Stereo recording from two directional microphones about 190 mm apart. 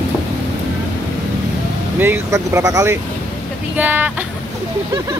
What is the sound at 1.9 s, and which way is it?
Speech, 10° right (ahead or behind).